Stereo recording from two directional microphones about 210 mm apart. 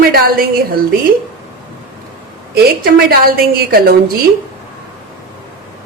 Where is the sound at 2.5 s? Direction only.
45° right (ahead or behind).